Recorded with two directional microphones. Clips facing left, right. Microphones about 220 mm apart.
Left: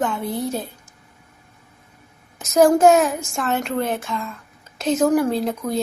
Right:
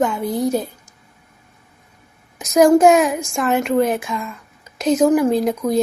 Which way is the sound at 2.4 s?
Centre (ahead or behind).